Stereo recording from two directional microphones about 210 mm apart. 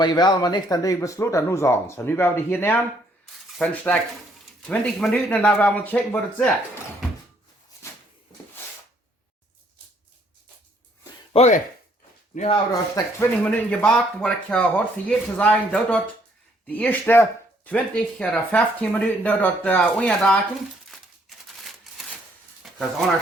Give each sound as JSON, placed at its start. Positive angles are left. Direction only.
{"t": 0.0, "sound": "speech", "side_deg": 20}
{"t": 11.3, "sound": "speech", "side_deg": 35}
{"t": 13.1, "sound": "speech", "side_deg": 5}
{"t": 20.9, "sound": "a sound", "side_deg": 0}
{"t": 22.6, "sound": "frying", "side_deg": 0}